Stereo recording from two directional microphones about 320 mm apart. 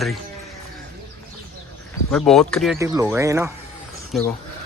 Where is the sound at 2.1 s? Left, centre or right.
Centre.